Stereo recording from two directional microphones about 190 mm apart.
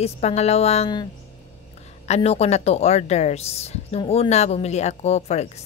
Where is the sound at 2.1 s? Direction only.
35° left (ahead or behind).